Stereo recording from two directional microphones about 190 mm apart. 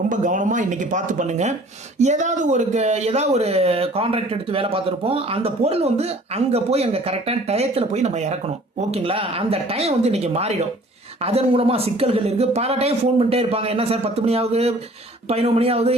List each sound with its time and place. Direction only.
0.1 s speech: 40° right (ahead or behind)